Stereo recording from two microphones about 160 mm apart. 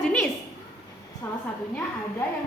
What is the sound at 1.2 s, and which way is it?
Speech, 10° left (ahead or behind).